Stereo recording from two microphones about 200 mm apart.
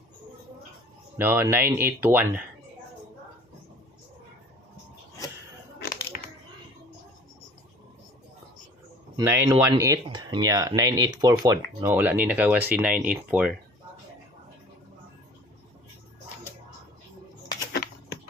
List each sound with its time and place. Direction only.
1.2 s speech: 10° right (ahead or behind)
5.8 s a sound: 45° left (ahead or behind)
9.1 s speech: 15° right (ahead or behind)